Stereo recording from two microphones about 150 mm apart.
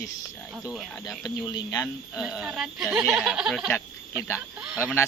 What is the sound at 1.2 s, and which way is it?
Speech, 25° left (ahead or behind).